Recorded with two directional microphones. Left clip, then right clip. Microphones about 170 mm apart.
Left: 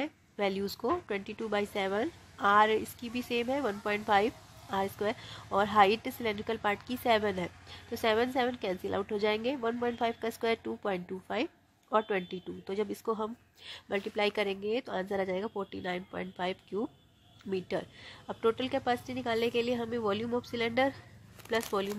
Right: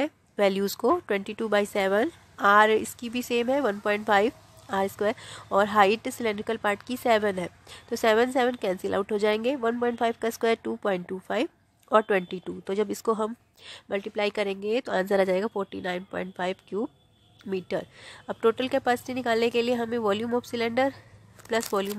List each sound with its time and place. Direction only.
0.0 s speech: 35° right (ahead or behind)
13.7 s speech: 20° right (ahead or behind)